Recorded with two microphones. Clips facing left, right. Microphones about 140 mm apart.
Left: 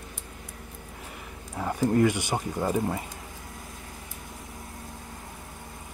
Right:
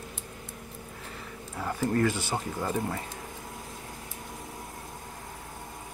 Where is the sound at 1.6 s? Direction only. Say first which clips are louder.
Left 4 dB; 15° left (ahead or behind).